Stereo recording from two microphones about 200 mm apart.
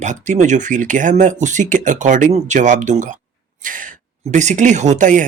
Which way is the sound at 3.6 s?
40° right (ahead or behind).